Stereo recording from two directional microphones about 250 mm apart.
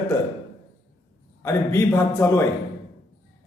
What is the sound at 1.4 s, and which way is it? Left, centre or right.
Speech, centre.